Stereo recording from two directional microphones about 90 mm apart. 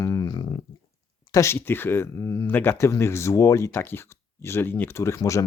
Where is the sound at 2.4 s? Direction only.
25° left (ahead or behind).